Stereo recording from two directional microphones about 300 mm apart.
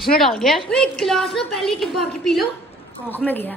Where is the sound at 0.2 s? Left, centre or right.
Centre.